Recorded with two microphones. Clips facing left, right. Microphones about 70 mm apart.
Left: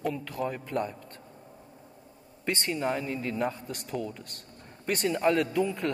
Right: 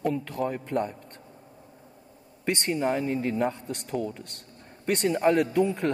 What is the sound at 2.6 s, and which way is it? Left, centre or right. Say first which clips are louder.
A man's voice: right 4 dB; right.